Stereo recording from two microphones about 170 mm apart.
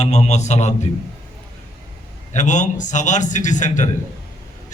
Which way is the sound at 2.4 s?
45° left (ahead or behind).